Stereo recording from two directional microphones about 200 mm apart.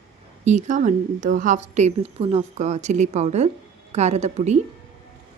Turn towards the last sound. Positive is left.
turn(degrees=-35)  # may be behind; listen again after turning